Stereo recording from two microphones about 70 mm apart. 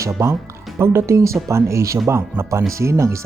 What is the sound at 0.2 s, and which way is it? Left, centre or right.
Speech, right.